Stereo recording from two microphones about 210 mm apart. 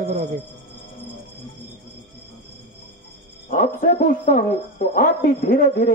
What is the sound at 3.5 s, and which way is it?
Speech, 40° left (ahead or behind).